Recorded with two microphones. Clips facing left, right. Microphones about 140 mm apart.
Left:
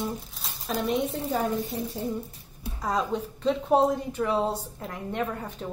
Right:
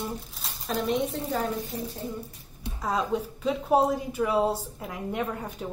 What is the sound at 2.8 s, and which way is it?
A woman's voice, 5° right (ahead or behind).